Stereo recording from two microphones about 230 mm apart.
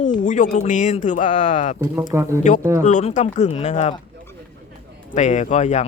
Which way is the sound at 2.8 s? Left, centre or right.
Left.